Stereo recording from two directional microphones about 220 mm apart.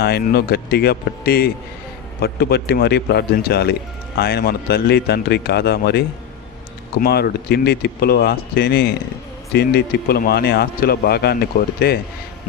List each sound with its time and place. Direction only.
0.0 s a man's voice: 45° left (ahead or behind)